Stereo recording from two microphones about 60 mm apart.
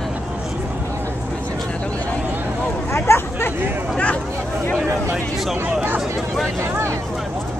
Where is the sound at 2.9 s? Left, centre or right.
Left.